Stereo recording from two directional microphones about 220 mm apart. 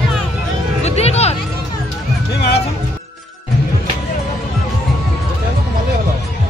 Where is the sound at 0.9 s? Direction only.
30° left (ahead or behind).